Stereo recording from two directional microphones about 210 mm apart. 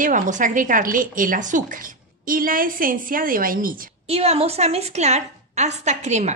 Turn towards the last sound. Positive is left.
turn(degrees=-35)  # may be behind; listen again after turning